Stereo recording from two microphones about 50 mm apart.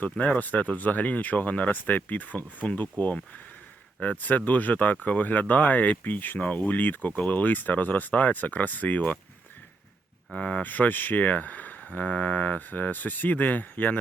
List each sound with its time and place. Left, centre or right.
0.3 s speech: left
4.0 s speech: left
6.4 s speech: left
10.3 s speech: left
10.6 s speech: left